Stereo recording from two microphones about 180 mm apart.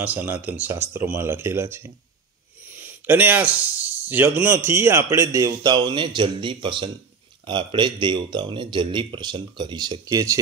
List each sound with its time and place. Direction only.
0.0 s speech: 10° right (ahead or behind)